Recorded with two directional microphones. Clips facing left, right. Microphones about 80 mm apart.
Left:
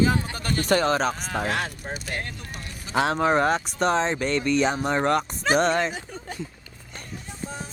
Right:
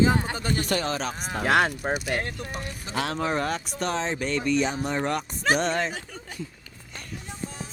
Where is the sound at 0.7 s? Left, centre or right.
Left.